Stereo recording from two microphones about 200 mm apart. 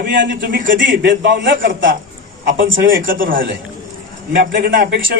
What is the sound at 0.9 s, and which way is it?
Speech, 65° right (ahead or behind).